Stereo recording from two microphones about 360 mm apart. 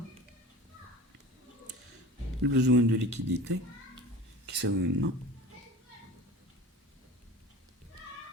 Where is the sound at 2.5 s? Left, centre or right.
Right.